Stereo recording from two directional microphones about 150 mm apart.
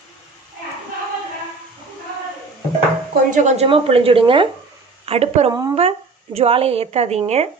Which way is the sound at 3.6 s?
40° right (ahead or behind).